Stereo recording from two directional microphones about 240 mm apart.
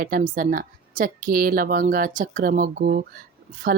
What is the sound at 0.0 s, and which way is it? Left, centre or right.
Speech, right.